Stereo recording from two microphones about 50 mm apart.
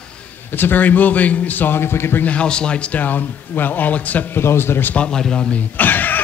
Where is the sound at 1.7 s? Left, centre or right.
Left.